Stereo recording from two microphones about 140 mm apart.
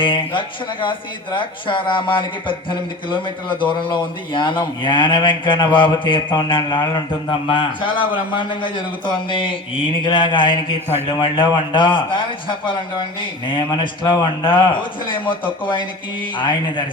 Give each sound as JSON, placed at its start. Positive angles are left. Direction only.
{"t": 0.0, "sound": "speech", "side_deg": 35}